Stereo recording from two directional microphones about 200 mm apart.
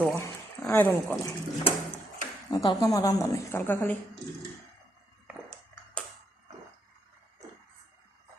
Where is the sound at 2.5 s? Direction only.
20° left (ahead or behind).